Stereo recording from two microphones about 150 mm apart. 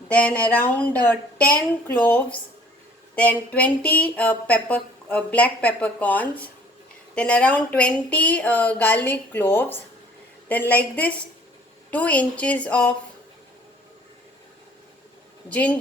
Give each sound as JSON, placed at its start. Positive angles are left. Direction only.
{"t": 0.1, "sound": "speech", "side_deg": 10}
{"t": 1.9, "sound": "speech", "side_deg": 10}
{"t": 10.5, "sound": "speech", "side_deg": 10}
{"t": 15.4, "sound": "speech", "side_deg": 10}